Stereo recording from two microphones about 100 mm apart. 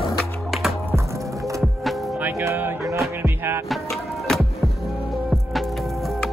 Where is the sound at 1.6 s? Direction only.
Centre (ahead or behind).